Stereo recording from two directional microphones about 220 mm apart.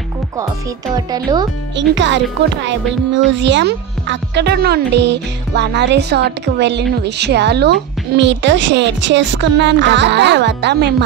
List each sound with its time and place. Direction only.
0.9 s speech: 15° right (ahead or behind)
1.8 s a child's voice: 55° right (ahead or behind)